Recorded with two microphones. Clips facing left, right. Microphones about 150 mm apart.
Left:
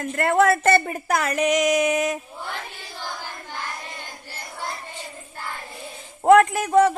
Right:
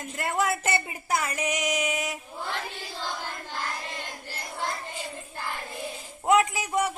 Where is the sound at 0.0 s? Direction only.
60° left (ahead or behind); by 1.3 s 75° left (ahead or behind).